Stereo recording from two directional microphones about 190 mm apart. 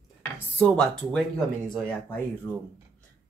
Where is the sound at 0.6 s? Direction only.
5° left (ahead or behind).